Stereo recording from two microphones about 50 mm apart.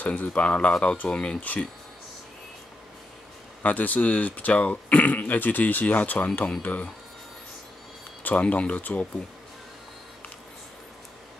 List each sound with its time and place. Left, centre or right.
0.0 s speech: left
1.4 s speech: left
3.6 s speech: left
8.4 s speech: left